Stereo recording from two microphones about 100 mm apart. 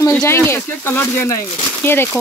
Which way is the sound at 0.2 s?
25° left (ahead or behind).